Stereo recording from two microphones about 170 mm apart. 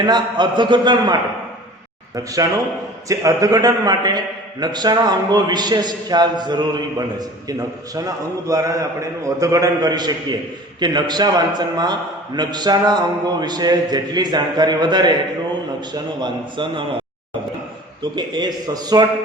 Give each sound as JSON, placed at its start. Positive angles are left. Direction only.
{"t": 0.1, "sound": "a man's voice", "side_deg": -25}
{"t": 2.1, "sound": "a man's voice", "side_deg": -20}
{"t": 7.9, "sound": "a man's voice", "side_deg": -20}
{"t": 18.1, "sound": "a man's voice", "side_deg": -25}